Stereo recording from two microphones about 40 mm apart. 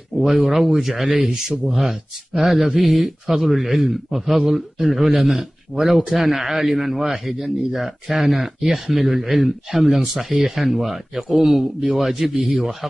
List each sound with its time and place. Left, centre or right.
0.2 s a man's voice: centre
4.4 s speech: centre
4.8 s a man's voice: centre